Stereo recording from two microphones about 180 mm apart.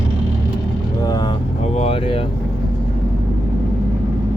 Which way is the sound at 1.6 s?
40° left (ahead or behind).